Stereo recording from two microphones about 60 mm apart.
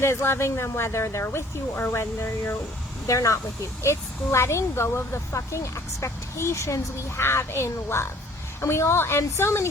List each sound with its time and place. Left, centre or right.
0.0 s speech: left
3.1 s speech: left
7.2 s speech: left